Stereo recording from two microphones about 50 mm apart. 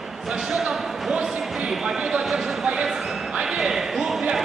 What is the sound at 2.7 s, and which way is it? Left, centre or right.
Basketball bounce, centre.